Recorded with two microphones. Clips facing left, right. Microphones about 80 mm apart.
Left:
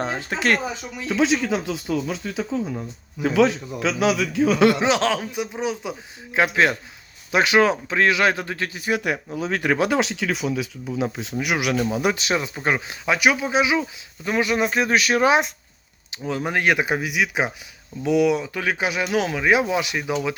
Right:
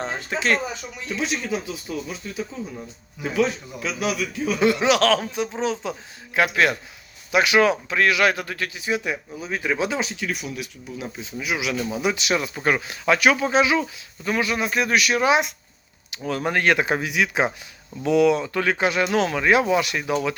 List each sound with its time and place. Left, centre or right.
0.0 s speech: left
1.0 s speech: left
4.8 s a man's voice: left
6.3 s a man's voice: left
8.8 s speech: left
9.4 s speech: left
10.1 s speech: left
11.3 s speech: left
12.0 s speech: left
12.6 s speech: centre
14.3 s a man's voice: left
16.1 s speech: centre